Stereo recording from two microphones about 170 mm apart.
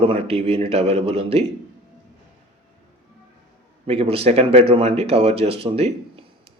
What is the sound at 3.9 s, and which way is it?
Speech, 35° right (ahead or behind).